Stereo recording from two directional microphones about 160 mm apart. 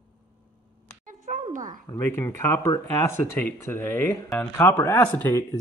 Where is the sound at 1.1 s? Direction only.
50° right (ahead or behind).